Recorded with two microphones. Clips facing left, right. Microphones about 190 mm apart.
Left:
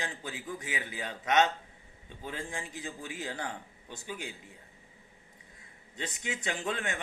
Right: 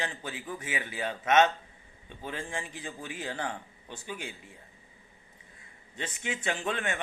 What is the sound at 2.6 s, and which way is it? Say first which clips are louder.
Speech: even; 15° right (ahead or behind).